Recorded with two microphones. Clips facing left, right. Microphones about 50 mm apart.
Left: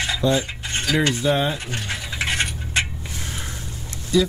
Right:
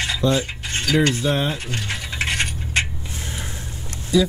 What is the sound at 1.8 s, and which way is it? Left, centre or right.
Scratch, right.